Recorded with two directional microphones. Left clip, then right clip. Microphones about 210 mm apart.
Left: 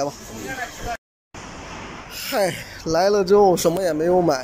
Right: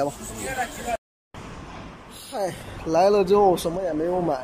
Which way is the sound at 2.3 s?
5° left (ahead or behind).